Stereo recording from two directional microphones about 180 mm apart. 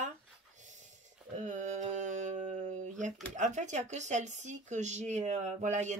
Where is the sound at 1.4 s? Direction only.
40° right (ahead or behind).